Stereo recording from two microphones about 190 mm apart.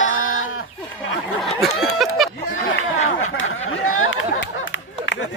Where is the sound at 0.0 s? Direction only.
90° left.